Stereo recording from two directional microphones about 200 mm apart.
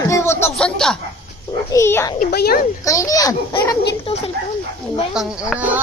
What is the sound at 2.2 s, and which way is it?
Speech, 50° left (ahead or behind).